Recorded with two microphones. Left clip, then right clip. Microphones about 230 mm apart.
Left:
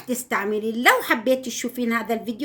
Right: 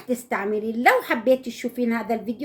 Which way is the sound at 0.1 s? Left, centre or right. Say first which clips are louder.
Left 1 dB; left.